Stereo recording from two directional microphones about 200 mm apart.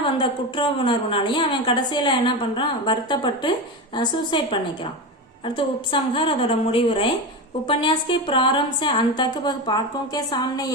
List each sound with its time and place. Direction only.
0.0 s a woman's voice: 25° left (ahead or behind)